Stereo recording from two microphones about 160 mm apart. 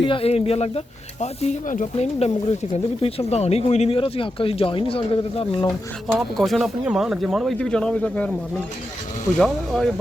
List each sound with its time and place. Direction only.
0.0 s speech: 35° left (ahead or behind)
6.1 s speech: centre (ahead or behind)
9.4 s speech: 5° left (ahead or behind)